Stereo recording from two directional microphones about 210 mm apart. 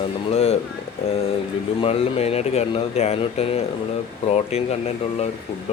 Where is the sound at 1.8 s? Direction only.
30° left (ahead or behind).